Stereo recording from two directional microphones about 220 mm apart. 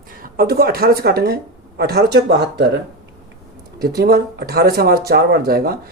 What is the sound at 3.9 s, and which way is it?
Speech, 45° right (ahead or behind).